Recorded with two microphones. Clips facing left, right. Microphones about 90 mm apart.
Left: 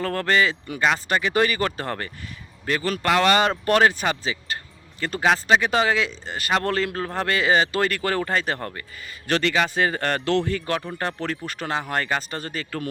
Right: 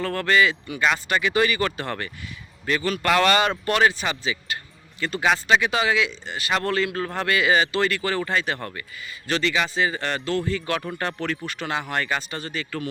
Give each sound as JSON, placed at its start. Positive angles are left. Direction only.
{"t": 0.0, "sound": "speech", "side_deg": 40}
{"t": 3.0, "sound": "speech", "side_deg": 25}
{"t": 3.7, "sound": "speech", "side_deg": 40}
{"t": 9.2, "sound": "a man's voice", "side_deg": 50}
{"t": 10.9, "sound": "speech", "side_deg": 35}